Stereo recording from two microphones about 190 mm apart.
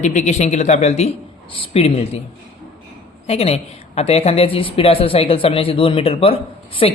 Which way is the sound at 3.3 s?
30° left (ahead or behind).